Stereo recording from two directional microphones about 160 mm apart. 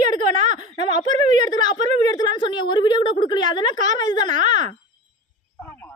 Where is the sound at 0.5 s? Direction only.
30° left (ahead or behind).